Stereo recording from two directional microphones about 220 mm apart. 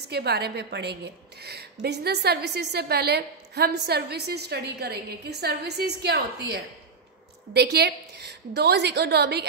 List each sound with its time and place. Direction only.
0.1 s a woman's voice: 45° right (ahead or behind)